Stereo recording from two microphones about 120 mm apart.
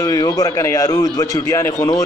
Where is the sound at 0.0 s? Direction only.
30° left (ahead or behind).